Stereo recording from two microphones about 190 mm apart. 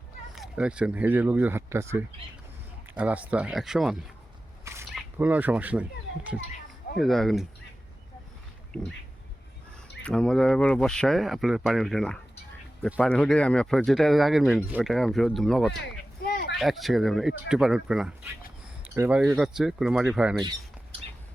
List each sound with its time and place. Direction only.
0.3 s speech: 5° right (ahead or behind)
4.6 s a sound: 15° right (ahead or behind)
5.1 s speech: 10° right (ahead or behind)
7.0 s speech: centre (ahead or behind)
10.0 s speech: 5° left (ahead or behind)
16.2 s a sound: 55° left (ahead or behind)
16.6 s speech: centre (ahead or behind)